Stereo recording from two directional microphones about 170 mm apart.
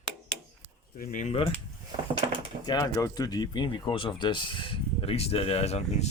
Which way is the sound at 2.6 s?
20° left (ahead or behind).